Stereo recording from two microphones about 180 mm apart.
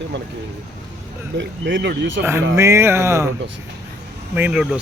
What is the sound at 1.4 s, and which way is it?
Speech, 75° right (ahead or behind).